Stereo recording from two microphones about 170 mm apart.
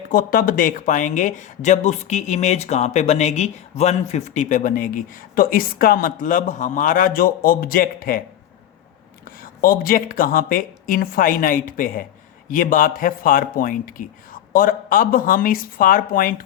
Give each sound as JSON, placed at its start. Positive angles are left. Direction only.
{"t": 0.1, "sound": "speech", "side_deg": 55}
{"t": 9.4, "sound": "speech", "side_deg": 60}